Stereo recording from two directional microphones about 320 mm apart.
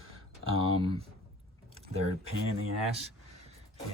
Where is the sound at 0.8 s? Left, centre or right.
Centre.